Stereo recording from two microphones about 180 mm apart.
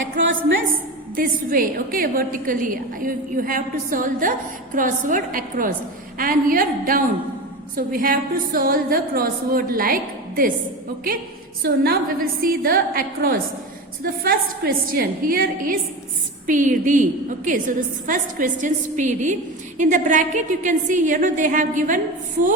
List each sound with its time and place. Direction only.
0.2 s a woman's voice: 90° right
1.1 s a woman's voice: 50° right (ahead or behind)
11.6 s a woman's voice: 55° right (ahead or behind)